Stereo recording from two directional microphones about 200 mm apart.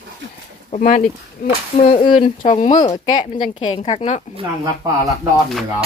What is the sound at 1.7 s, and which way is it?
Speech, 30° left (ahead or behind).